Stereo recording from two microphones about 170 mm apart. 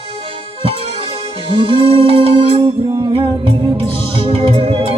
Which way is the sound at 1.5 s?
30° right (ahead or behind).